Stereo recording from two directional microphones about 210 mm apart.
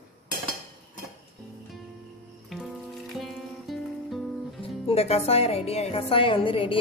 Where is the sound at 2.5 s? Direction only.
Centre (ahead or behind).